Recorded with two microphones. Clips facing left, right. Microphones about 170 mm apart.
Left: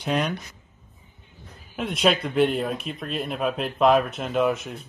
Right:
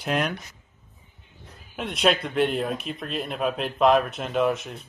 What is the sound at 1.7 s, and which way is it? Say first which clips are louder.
Speech: left 1 dB; centre (ahead or behind).